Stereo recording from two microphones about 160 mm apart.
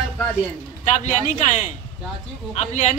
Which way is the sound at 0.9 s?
50° left (ahead or behind).